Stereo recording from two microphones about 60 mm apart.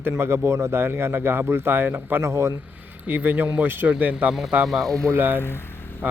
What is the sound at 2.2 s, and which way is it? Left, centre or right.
Speech, right.